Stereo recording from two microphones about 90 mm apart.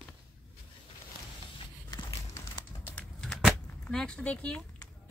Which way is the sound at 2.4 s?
20° left (ahead or behind).